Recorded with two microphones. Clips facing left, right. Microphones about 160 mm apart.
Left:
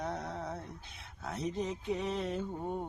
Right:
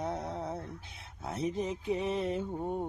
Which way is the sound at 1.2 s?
25° right (ahead or behind).